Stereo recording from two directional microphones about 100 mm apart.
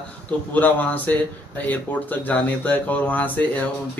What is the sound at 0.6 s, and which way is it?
Speech, 15° left (ahead or behind).